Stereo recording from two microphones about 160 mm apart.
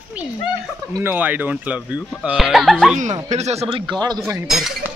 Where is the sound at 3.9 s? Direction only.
25° right (ahead or behind).